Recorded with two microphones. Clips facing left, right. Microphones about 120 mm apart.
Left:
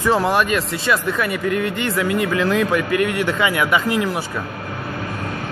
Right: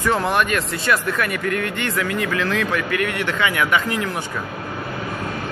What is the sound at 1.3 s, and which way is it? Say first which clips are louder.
Speech: left 3 dB; 15° left (ahead or behind).